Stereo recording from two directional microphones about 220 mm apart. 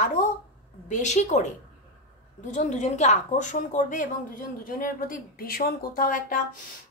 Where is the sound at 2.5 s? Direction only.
35° left (ahead or behind).